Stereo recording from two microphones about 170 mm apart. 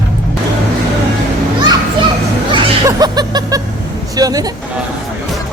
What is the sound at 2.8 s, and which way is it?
Music, 25° right (ahead or behind).